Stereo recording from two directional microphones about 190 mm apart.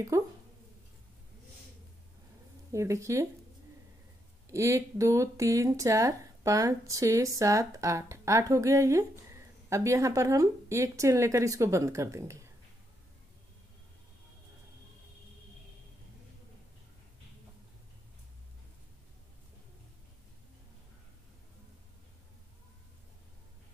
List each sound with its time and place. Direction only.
0.1 s speech: 20° right (ahead or behind)
2.7 s speech: 15° right (ahead or behind)
4.5 s speech: 15° right (ahead or behind)